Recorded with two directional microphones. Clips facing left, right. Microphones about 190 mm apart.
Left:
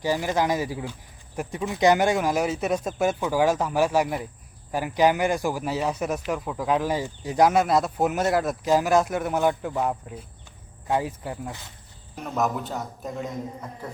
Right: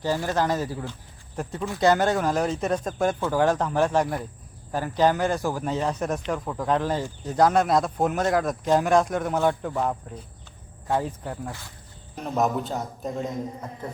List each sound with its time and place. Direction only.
0.0 s a man's voice: 15° left (ahead or behind)
12.6 s a man's voice: 20° right (ahead or behind)